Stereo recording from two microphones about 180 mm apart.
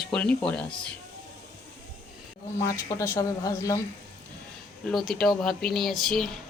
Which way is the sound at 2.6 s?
15° left (ahead or behind).